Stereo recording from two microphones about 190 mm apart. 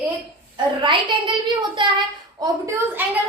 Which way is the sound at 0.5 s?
25° right (ahead or behind).